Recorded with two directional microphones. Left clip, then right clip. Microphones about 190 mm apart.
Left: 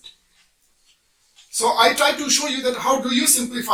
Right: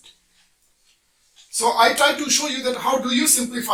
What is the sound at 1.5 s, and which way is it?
Speech, 15° right (ahead or behind).